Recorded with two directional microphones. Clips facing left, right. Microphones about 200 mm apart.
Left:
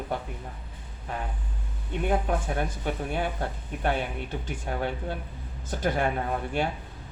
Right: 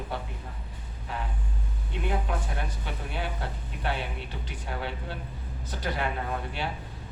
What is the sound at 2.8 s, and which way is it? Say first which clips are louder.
Speech: left 6 dB; 50° left (ahead or behind).